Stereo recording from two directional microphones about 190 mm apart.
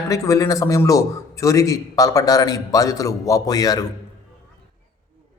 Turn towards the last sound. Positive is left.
turn(degrees=20)  # may be behind; listen again after turning